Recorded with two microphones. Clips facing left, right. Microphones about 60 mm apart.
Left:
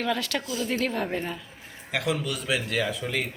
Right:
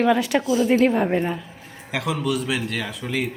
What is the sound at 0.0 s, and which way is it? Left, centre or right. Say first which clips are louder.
A woman's voice: right 9 dB; centre.